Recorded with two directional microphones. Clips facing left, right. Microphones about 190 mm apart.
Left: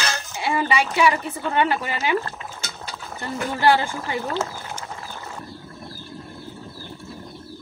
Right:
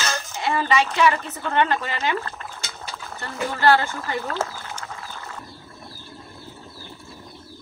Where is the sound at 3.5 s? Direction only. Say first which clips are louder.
Even; 15° left (ahead or behind).